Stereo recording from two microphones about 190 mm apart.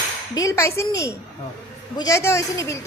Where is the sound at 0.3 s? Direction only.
15° left (ahead or behind).